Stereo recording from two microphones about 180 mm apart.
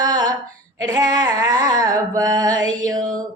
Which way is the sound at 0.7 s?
20° right (ahead or behind).